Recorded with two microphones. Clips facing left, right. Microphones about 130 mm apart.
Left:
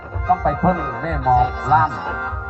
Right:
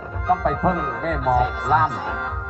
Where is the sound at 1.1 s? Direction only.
35° left (ahead or behind).